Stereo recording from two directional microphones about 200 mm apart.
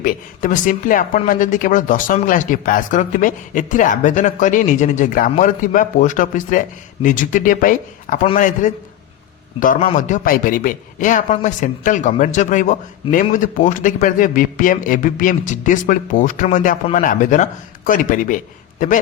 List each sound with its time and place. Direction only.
0.0 s speech: 40° left (ahead or behind)
9.8 s speech: 40° left (ahead or behind)